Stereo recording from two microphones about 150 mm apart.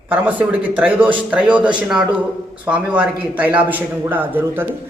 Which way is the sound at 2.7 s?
10° right (ahead or behind).